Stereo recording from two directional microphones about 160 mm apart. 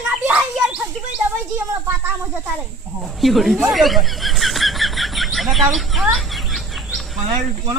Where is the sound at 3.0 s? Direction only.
Centre (ahead or behind).